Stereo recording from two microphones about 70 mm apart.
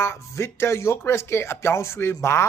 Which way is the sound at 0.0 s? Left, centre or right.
Left.